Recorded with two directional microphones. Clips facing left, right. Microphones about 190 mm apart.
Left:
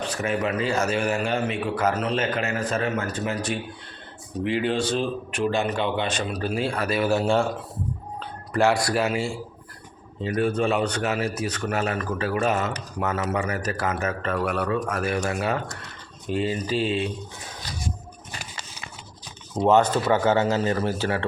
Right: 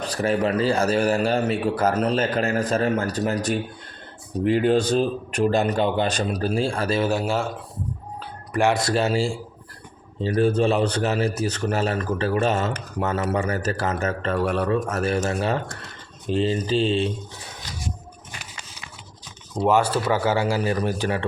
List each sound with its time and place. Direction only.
0.0 s a man's voice: 35° right (ahead or behind)
18.3 s a sound: 40° left (ahead or behind)
19.7 s speech: 10° right (ahead or behind)